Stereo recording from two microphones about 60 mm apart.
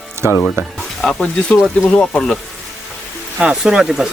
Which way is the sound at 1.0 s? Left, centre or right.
Centre.